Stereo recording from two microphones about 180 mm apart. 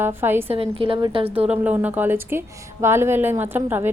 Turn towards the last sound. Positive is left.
turn(degrees=-10)  # may be behind; listen again after turning